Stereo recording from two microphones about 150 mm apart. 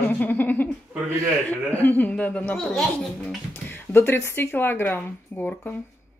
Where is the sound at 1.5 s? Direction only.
10° left (ahead or behind).